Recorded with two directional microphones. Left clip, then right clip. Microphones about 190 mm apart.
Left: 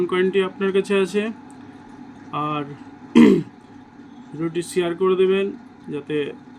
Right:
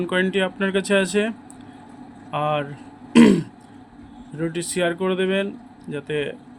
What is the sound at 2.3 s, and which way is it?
Speech, 45° right (ahead or behind).